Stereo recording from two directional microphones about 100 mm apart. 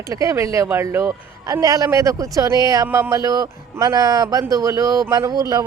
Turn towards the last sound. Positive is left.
turn(degrees=-40)  # may be behind; listen again after turning